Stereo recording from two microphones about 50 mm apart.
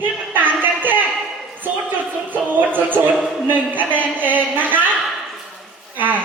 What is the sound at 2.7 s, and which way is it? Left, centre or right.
Speech, right.